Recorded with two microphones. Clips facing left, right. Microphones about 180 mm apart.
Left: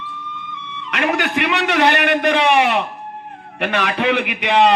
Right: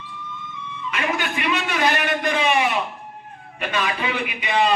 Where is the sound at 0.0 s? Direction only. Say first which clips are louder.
Left 4 dB; 65° left (ahead or behind).